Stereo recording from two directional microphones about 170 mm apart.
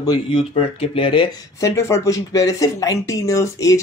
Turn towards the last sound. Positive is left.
turn(degrees=20)  # may be behind; listen again after turning